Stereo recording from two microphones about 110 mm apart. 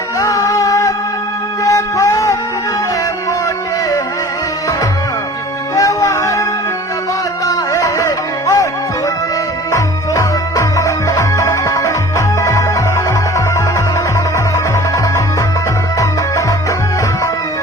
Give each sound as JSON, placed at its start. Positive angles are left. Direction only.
{"t": 0.2, "sound": "music", "side_deg": 30}
{"t": 5.7, "sound": "music", "side_deg": 30}
{"t": 7.4, "sound": "music", "side_deg": 30}
{"t": 9.7, "sound": "music", "side_deg": 30}
{"t": 14.3, "sound": "music", "side_deg": 25}